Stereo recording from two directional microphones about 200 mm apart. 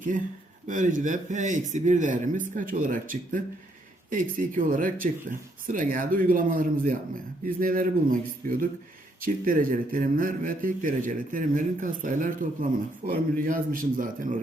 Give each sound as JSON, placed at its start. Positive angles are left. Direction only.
{"t": 0.7, "sound": "a man's voice", "side_deg": -40}